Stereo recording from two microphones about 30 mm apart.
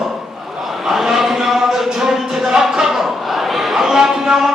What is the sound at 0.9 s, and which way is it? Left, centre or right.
A man's voice, centre.